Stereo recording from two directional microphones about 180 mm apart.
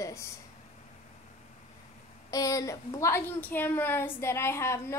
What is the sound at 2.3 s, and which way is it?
A woman's voice, 20° left (ahead or behind).